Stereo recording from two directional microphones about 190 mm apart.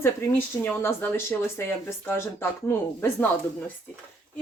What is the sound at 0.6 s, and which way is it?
Speech, 10° left (ahead or behind).